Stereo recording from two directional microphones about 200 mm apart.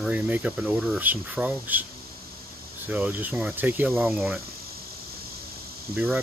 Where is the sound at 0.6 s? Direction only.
5° left (ahead or behind).